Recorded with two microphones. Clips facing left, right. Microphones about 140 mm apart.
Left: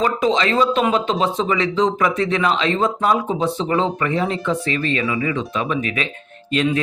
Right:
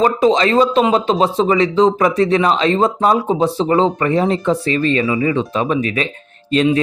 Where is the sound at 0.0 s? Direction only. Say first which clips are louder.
Right 5 dB; 35° right (ahead or behind).